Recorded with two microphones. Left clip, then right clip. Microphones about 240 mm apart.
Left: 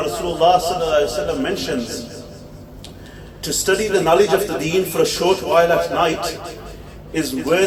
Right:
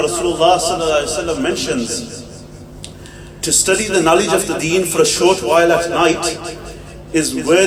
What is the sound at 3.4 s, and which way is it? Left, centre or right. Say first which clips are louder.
A man's voice: right 3 dB; right.